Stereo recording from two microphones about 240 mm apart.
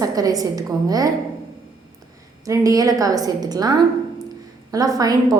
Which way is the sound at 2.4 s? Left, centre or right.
Centre.